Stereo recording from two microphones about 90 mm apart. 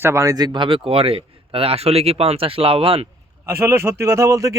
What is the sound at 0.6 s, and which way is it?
Speech, 85° right.